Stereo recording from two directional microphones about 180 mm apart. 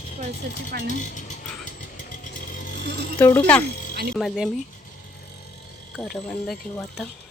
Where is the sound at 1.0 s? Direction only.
45° left (ahead or behind).